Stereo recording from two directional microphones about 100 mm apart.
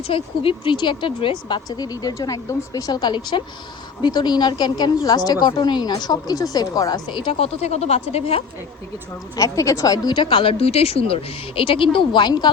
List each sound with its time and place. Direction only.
0.1 s a woman's voice: 60° left (ahead or behind); by 7.0 s 40° left (ahead or behind)
7.2 s speech: 75° left (ahead or behind)
9.3 s a woman's voice: 35° left (ahead or behind); by 11.9 s 60° left (ahead or behind)
11.9 s speech: 50° left (ahead or behind)